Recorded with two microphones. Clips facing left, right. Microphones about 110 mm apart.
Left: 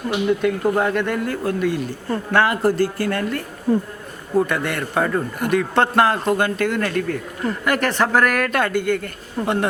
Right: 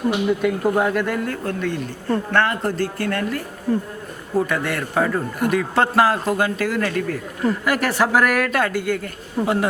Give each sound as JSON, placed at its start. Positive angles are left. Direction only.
{"t": 0.1, "sound": "a man's voice", "side_deg": -5}
{"t": 3.7, "sound": "speech", "side_deg": 15}
{"t": 4.4, "sound": "a man's voice", "side_deg": 0}